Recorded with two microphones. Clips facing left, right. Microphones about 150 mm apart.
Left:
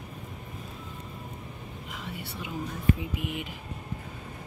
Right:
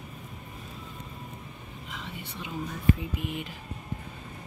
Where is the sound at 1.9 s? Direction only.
10° left (ahead or behind).